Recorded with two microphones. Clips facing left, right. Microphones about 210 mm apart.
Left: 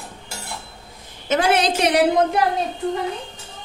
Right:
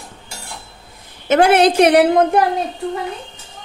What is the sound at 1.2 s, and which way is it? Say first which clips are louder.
A woman's voice: right 7 dB; 60° right (ahead or behind).